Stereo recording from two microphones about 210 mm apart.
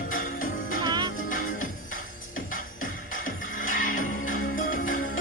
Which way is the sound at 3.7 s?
40° left (ahead or behind).